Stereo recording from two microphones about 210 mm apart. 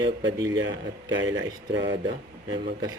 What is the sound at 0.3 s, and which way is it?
Speech, 20° right (ahead or behind).